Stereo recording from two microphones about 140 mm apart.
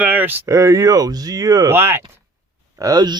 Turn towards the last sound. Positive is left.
turn(degrees=-30)  # may be behind; listen again after turning